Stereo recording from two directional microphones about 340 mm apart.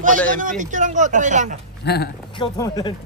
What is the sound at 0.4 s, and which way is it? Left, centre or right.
Speech, right.